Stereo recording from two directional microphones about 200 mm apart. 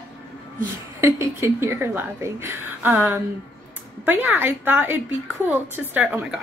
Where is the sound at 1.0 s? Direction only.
15° right (ahead or behind).